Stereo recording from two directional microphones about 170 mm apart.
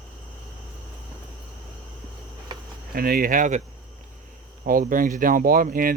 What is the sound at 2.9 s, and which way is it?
Speech, 60° right (ahead or behind).